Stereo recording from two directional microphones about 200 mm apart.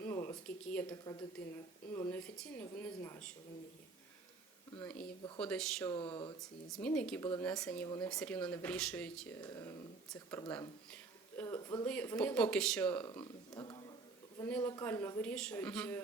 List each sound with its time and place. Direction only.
0.0 s a sound: 15° left (ahead or behind)
0.4 s speech: 5° left (ahead or behind)
1.1 s a woman's voice: 15° left (ahead or behind)
4.8 s speech: 5° left (ahead or behind)
5.9 s speech: 25° left (ahead or behind)
6.4 s speech: centre (ahead or behind)
11.4 s speech: 20° left (ahead or behind)
11.9 s speech: 5° left (ahead or behind)
13.5 s a sound: 20° left (ahead or behind)
14.3 s a woman's voice: 5° left (ahead or behind)